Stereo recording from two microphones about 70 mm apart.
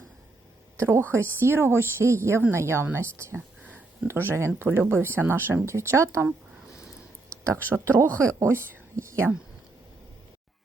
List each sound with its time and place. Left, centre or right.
0.8 s speech: right
7.4 s speech: right
8.2 s speech: right